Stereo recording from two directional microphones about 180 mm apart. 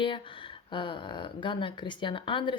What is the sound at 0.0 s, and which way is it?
Speech, 25° left (ahead or behind).